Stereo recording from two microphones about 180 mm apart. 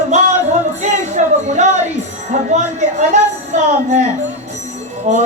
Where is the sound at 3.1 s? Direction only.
40° right (ahead or behind).